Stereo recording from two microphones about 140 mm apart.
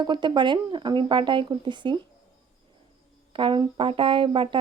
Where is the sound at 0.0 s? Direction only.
35° right (ahead or behind).